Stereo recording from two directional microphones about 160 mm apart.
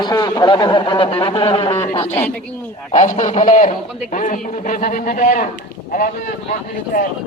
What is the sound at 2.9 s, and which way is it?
A man's voice, 55° left (ahead or behind).